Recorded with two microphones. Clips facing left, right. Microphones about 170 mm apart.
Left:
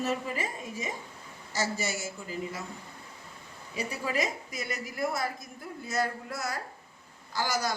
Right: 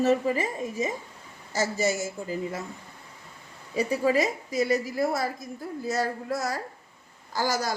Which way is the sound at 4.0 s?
40° right (ahead or behind).